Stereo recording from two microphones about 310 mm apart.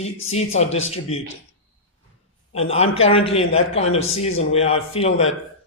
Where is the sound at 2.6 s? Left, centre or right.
Centre.